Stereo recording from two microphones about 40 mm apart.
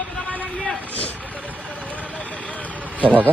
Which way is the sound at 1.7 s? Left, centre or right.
Left.